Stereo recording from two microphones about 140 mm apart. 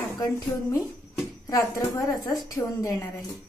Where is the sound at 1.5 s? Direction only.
25° left (ahead or behind).